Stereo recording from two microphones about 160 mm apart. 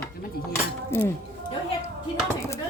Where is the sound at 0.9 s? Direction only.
15° left (ahead or behind).